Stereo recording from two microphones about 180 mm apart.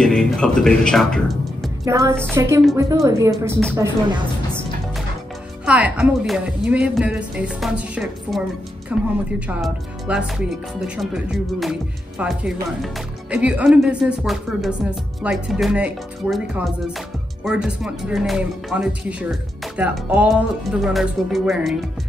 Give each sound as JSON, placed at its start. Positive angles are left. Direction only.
{"t": 0.0, "sound": "speech", "side_deg": 5}
{"t": 1.9, "sound": "a woman's voice", "side_deg": -15}
{"t": 5.7, "sound": "a woman's voice", "side_deg": -5}